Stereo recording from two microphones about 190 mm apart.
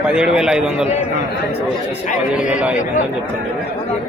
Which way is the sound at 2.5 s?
5° right (ahead or behind).